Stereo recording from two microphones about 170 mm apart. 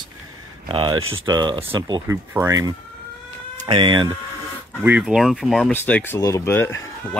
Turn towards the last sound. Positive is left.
turn(degrees=15)  # may be behind; listen again after turning